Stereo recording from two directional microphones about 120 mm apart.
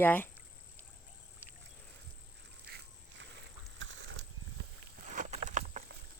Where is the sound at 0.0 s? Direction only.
15° left (ahead or behind).